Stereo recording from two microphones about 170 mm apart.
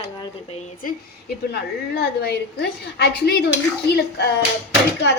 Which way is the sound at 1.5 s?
70° left (ahead or behind).